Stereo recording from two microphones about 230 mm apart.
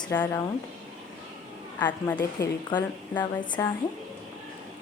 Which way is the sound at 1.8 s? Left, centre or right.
Centre.